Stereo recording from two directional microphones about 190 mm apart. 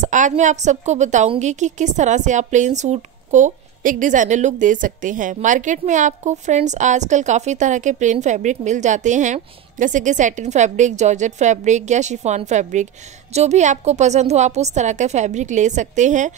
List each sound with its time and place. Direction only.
0.0 s a woman's voice: 40° right (ahead or behind)